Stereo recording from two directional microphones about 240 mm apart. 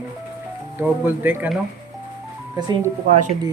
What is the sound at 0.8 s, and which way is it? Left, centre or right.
Speech, centre.